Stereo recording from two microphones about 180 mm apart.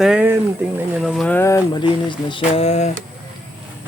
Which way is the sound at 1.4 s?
15° left (ahead or behind).